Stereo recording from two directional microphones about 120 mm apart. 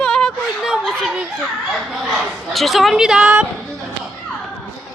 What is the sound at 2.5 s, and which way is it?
Speech, centre (ahead or behind).